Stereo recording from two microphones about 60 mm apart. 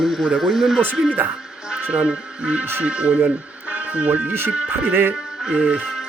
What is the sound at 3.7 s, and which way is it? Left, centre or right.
Music, right.